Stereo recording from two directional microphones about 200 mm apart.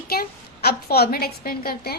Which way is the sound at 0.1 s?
50° left (ahead or behind).